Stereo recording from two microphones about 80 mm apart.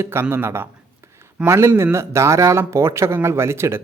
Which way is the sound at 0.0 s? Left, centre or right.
Right.